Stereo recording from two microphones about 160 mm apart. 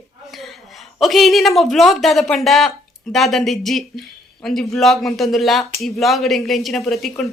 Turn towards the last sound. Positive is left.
turn(degrees=0)  # may be behind; listen again after turning